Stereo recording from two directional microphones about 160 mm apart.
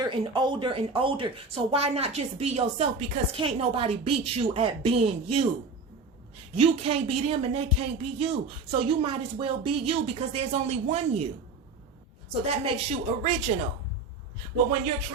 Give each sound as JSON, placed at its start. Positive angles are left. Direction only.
{"t": 0.0, "sound": "speech", "side_deg": -30}
{"t": 12.5, "sound": "speech", "side_deg": -40}